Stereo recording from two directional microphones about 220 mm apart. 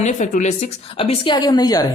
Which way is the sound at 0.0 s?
35° left (ahead or behind).